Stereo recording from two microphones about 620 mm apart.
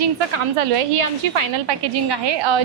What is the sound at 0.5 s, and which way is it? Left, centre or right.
A woman's voice, right.